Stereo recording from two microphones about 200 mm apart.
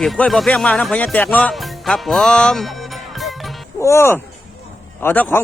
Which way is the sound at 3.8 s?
15° left (ahead or behind).